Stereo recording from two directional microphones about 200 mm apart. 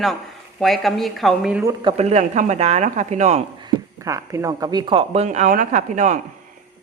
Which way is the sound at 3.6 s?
15° right (ahead or behind).